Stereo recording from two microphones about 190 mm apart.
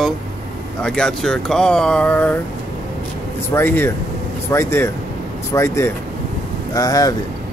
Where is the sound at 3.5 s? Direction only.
10° left (ahead or behind).